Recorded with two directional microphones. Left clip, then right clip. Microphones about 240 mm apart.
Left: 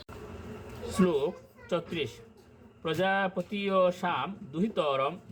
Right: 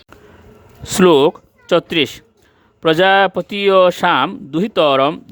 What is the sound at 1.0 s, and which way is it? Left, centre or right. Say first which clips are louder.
Speech: right 18 dB; right.